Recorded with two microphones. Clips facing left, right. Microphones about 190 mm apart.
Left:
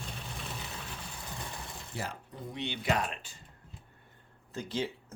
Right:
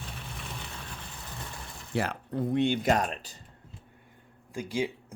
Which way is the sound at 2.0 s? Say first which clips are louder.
Right 11 dB; 65° right (ahead or behind).